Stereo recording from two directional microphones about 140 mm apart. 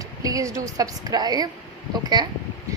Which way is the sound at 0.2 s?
25° right (ahead or behind).